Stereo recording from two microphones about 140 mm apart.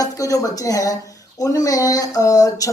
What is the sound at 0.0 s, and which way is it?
Speech, 25° left (ahead or behind).